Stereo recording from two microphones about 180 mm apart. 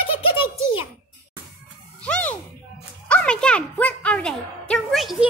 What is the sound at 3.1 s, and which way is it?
A child's voice, 5° left (ahead or behind).